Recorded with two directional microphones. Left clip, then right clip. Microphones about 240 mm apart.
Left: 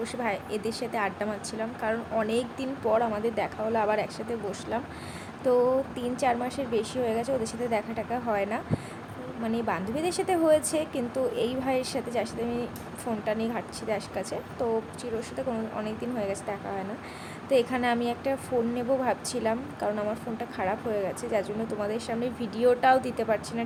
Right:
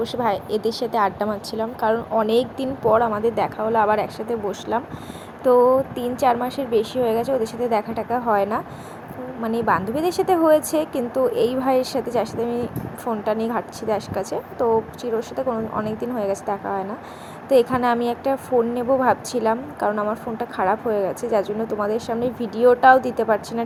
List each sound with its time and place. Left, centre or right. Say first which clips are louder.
0.0 s a woman's voice: right 9 dB; centre